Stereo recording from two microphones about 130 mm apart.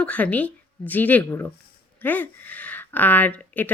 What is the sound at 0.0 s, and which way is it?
Speech, 10° left (ahead or behind).